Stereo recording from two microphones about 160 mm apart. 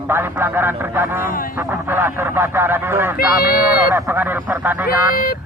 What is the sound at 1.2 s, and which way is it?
Speech, 60° left (ahead or behind).